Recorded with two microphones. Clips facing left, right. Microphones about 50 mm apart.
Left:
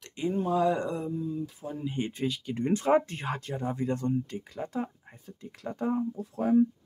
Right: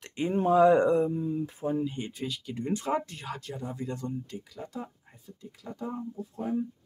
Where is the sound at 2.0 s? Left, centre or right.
Left.